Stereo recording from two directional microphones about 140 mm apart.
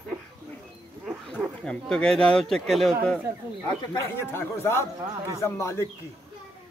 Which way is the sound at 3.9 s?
15° left (ahead or behind).